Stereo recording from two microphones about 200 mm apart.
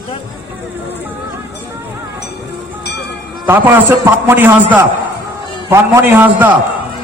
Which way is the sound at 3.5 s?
10° right (ahead or behind).